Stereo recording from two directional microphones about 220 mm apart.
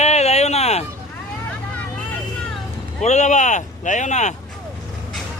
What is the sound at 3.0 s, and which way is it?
Speech, 30° left (ahead or behind).